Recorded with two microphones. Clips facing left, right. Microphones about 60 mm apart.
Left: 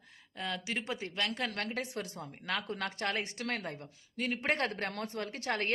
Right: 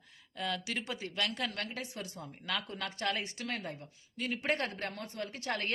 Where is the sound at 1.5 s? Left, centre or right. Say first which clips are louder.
Left 3 dB; left.